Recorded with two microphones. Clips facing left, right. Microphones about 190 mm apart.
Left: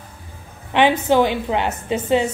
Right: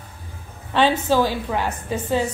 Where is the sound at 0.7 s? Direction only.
20° left (ahead or behind).